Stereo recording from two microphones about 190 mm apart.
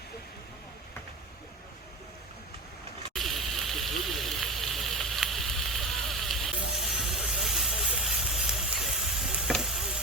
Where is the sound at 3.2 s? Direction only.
Centre (ahead or behind).